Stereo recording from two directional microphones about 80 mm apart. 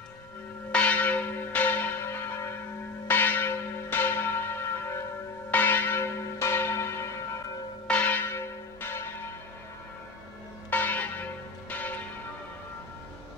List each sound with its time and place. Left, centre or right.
0.7 s church bell: centre; by 7.2 s left
7.9 s church bell: centre
10.7 s church bell: left